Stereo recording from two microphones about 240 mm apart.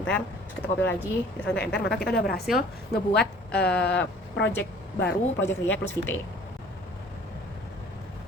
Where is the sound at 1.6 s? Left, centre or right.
Centre.